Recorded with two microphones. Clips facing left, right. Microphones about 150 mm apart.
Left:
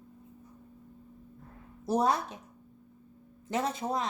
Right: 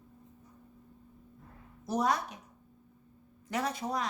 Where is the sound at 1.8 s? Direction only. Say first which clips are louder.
Left 3 dB; 30° left (ahead or behind).